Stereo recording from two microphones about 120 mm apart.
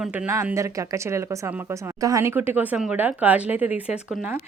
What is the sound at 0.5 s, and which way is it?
Speech, 25° right (ahead or behind).